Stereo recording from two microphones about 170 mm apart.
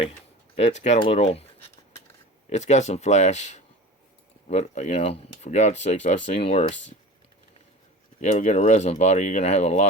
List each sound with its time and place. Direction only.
0.5 s speech: 40° left (ahead or behind)
2.5 s speech: 40° left (ahead or behind)
8.2 s speech: 45° left (ahead or behind)